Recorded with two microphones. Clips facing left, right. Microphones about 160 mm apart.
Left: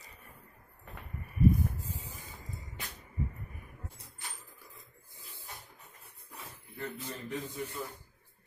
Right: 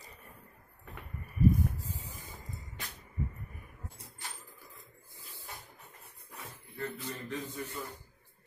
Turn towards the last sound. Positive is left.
turn(degrees=15)  # may be behind; listen again after turning